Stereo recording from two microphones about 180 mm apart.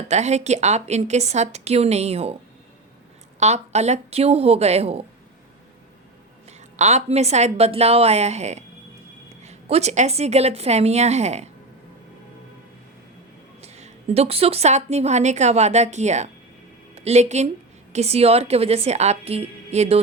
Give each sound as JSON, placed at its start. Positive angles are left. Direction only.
{"t": 0.1, "sound": "a woman's voice", "side_deg": -40}
{"t": 3.4, "sound": "a woman's voice", "side_deg": -40}
{"t": 6.6, "sound": "a woman's voice", "side_deg": -40}
{"t": 13.6, "sound": "a woman's voice", "side_deg": -35}